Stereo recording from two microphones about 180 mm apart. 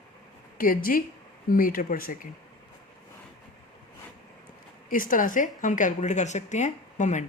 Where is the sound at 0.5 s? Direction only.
50° left (ahead or behind).